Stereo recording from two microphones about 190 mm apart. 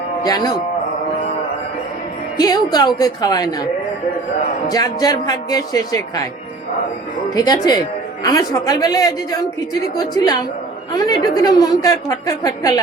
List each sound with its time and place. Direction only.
0.3 s speech: 20° left (ahead or behind)
2.4 s speech: 20° left (ahead or behind)
4.7 s speech: 20° left (ahead or behind)
7.3 s speech: 20° left (ahead or behind)